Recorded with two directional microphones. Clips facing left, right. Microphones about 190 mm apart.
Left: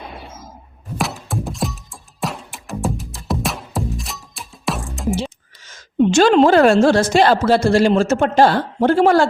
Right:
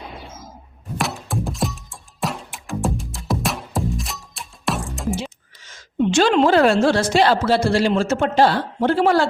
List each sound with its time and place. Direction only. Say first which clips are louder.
0.9 s music: left 1 dB; centre (ahead or behind)
5.6 s a woman's voice: left 4 dB; 45° left (ahead or behind)